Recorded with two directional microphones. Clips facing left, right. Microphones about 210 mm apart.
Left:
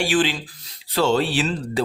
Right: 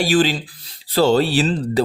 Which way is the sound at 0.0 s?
40° right (ahead or behind).